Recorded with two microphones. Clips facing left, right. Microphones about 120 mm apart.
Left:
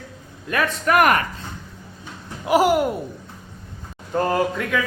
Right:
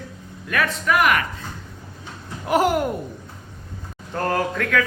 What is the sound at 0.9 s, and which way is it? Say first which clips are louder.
Speech: left 3 dB; 50° left (ahead or behind).